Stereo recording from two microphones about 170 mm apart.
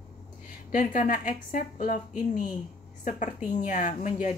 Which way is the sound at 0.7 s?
50° left (ahead or behind).